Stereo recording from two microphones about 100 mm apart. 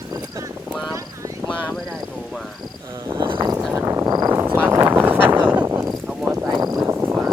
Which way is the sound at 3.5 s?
25° right (ahead or behind).